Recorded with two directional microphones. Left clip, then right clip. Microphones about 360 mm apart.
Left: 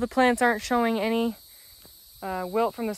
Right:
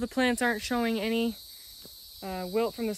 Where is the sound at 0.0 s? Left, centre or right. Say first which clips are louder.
Left 6 dB; centre.